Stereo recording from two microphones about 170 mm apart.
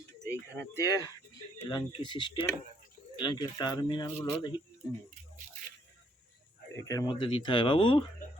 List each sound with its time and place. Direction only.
0.3 s speech: 15° left (ahead or behind)
6.7 s speech: 20° left (ahead or behind)